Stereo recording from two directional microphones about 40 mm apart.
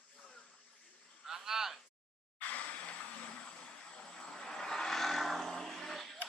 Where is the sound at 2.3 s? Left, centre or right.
Left.